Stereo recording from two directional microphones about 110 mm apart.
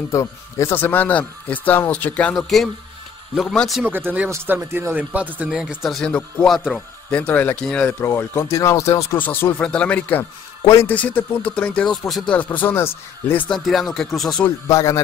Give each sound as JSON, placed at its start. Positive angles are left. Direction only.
{"t": 0.1, "sound": "speech", "side_deg": 25}
{"t": 2.3, "sound": "speech", "side_deg": 0}
{"t": 3.8, "sound": "speech", "side_deg": -20}
{"t": 12.3, "sound": "speech", "side_deg": 15}
{"t": 13.7, "sound": "speech", "side_deg": 0}
{"t": 14.7, "sound": "speech", "side_deg": 30}